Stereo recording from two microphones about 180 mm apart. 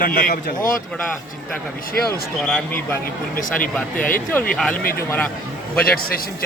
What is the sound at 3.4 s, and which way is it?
Speech, 50° left (ahead or behind).